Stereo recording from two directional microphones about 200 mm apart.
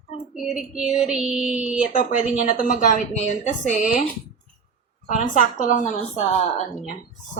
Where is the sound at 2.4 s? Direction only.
40° left (ahead or behind).